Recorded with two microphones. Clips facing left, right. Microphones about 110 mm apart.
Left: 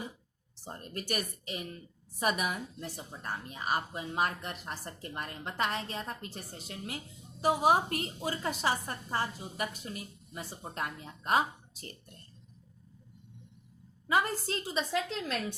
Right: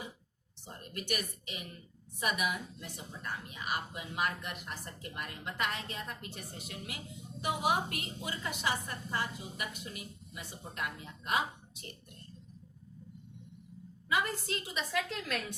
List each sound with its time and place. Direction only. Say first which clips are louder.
0.6 s a woman's voice: left 3 dB; 40° left (ahead or behind)
14.1 s a woman's voice: left 4 dB; 35° left (ahead or behind)